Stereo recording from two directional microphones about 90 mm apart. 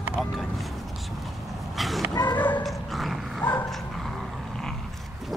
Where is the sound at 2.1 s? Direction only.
50° left (ahead or behind).